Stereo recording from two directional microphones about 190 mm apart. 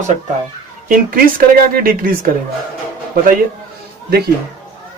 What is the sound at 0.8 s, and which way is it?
A woman's voice, 45° right (ahead or behind).